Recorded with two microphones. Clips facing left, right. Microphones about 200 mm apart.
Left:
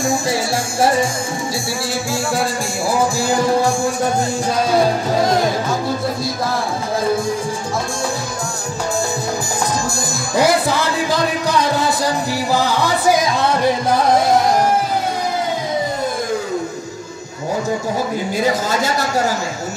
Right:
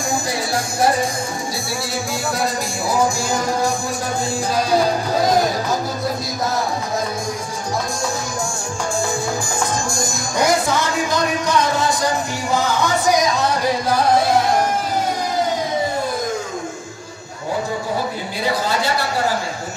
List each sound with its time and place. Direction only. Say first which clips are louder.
10.4 s music: left 2 dB; 35° left (ahead or behind)
12.5 s music: right 1 dB; 30° left (ahead or behind)
18.4 s speech: left 1 dB; 45° left (ahead or behind)